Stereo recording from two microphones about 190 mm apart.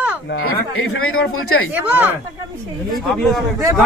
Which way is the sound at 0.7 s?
90° left.